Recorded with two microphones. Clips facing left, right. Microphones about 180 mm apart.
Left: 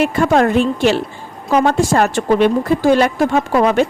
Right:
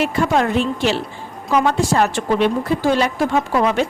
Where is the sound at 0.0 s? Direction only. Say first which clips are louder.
Left 4 dB; 50° left (ahead or behind).